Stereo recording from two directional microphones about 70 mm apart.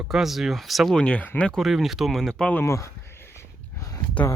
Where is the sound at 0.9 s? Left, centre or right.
Centre.